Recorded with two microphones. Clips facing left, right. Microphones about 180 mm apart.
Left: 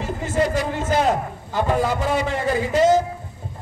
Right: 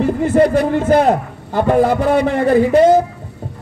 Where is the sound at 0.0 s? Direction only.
60° right (ahead or behind).